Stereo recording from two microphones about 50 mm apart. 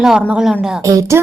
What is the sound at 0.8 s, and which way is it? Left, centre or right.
Speech, right.